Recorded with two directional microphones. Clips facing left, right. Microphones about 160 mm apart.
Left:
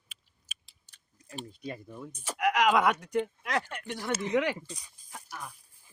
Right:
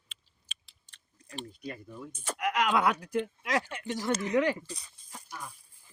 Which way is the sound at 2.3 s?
5° left (ahead or behind).